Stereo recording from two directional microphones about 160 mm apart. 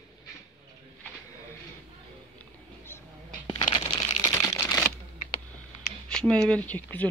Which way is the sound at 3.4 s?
30° left (ahead or behind).